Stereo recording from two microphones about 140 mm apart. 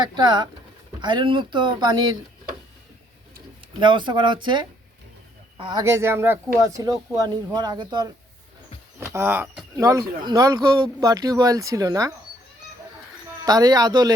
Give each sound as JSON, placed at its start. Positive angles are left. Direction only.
{"t": 0.0, "sound": "speech", "side_deg": -30}
{"t": 3.8, "sound": "speech", "side_deg": -35}
{"t": 5.8, "sound": "a woman's voice", "side_deg": -20}
{"t": 9.0, "sound": "a woman's voice", "side_deg": -20}
{"t": 13.4, "sound": "a woman's voice", "side_deg": -25}